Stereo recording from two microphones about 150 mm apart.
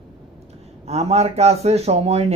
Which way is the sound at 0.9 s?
45° right (ahead or behind).